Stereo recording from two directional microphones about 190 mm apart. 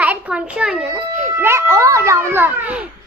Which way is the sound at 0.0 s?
5° right (ahead or behind).